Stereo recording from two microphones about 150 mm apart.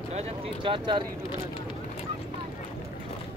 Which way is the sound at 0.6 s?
35° right (ahead or behind).